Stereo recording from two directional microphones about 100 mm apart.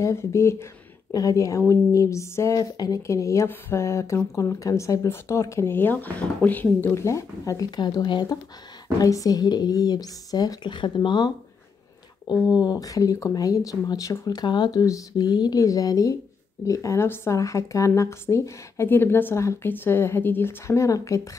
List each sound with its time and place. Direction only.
0.0 s speech: 30° left (ahead or behind)
7.0 s speech: 30° left (ahead or behind); by 11.3 s 45° left (ahead or behind)
12.6 s speech: 35° left (ahead or behind)